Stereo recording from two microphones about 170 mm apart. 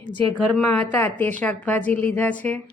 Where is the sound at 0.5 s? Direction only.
10° left (ahead or behind).